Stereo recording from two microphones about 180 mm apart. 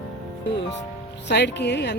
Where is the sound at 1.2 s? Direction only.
70° left (ahead or behind).